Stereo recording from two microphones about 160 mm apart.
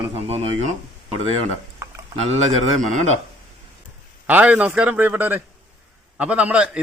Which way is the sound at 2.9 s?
45° right (ahead or behind).